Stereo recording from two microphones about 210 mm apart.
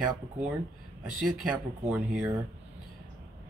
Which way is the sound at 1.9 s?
5° right (ahead or behind).